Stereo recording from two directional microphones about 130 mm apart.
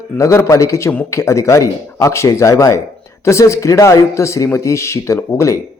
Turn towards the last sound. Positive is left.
turn(degrees=25)  # may be behind; listen again after turning